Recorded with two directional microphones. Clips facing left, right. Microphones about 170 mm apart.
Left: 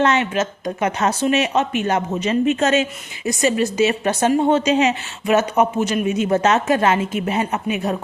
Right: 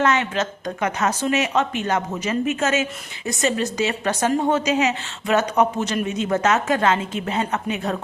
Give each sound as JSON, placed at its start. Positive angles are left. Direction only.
{"t": 0.0, "sound": "speech", "side_deg": 20}
{"t": 2.1, "sound": "speech", "side_deg": 30}
{"t": 3.2, "sound": "speech", "side_deg": 20}
{"t": 5.2, "sound": "speech", "side_deg": 20}